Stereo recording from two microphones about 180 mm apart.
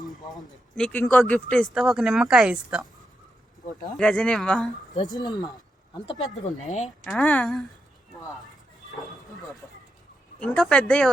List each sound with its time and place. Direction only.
0.8 s speech: 5° left (ahead or behind)
3.9 s speech: 5° left (ahead or behind)
5.1 s speech: 25° left (ahead or behind)
6.7 s speech: 40° left (ahead or behind)
7.0 s speech: 5° left (ahead or behind)
10.4 s speech: 5° left (ahead or behind)